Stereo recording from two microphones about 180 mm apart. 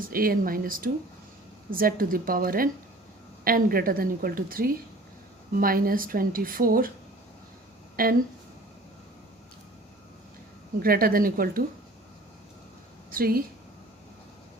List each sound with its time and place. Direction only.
0.0 s a woman's voice: 55° right (ahead or behind)
8.0 s a woman's voice: 55° right (ahead or behind)
10.8 s a woman's voice: 55° right (ahead or behind)
13.1 s a woman's voice: 55° right (ahead or behind)